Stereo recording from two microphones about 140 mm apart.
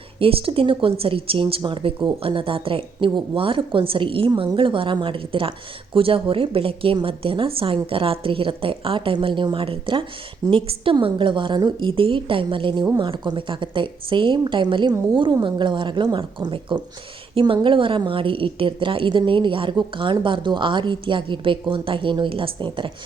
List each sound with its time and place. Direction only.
0.2 s speech: 40° right (ahead or behind)